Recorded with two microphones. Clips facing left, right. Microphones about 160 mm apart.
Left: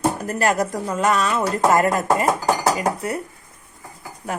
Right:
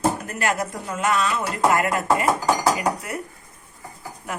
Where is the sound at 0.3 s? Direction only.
35° left (ahead or behind).